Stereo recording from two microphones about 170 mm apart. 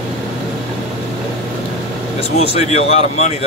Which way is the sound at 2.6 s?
40° left (ahead or behind).